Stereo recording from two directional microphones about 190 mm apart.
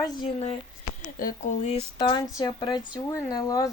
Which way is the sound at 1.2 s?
45° left (ahead or behind).